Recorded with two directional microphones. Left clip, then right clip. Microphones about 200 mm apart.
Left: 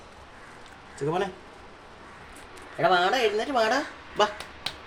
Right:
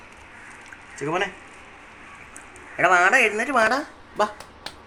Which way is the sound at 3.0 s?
20° right (ahead or behind).